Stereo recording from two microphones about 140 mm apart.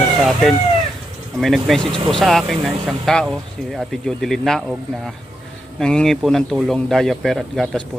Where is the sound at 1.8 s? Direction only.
35° right (ahead or behind).